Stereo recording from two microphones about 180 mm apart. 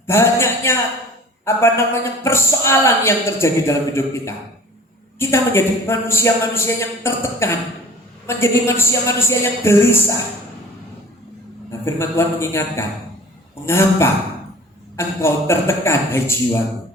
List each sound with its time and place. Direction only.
0.1 s a man's voice: 15° left (ahead or behind)
11.9 s a man's voice: 15° left (ahead or behind)